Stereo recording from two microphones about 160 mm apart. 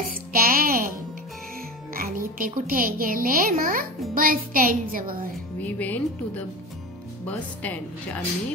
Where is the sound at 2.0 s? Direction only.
60° right (ahead or behind).